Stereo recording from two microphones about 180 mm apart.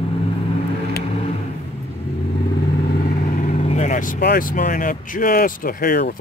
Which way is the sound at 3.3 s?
40° left (ahead or behind).